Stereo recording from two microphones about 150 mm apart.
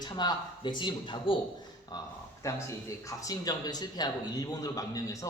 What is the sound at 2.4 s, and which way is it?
Speech, 20° left (ahead or behind).